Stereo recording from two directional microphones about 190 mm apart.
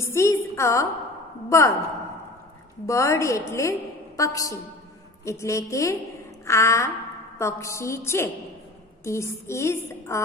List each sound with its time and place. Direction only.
0.0 s a woman's voice: 15° left (ahead or behind)
2.9 s a woman's voice: 15° left (ahead or behind)